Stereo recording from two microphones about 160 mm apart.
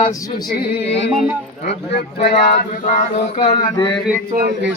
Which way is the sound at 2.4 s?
90° left.